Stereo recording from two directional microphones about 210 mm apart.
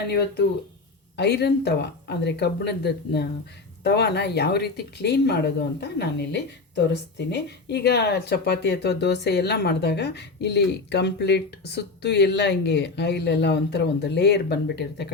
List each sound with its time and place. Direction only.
1.1 s speech: 50° left (ahead or behind)